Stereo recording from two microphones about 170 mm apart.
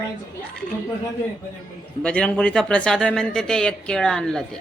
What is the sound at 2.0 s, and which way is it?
Speech, 5° left (ahead or behind).